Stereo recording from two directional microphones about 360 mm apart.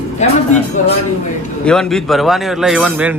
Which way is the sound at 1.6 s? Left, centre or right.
Centre.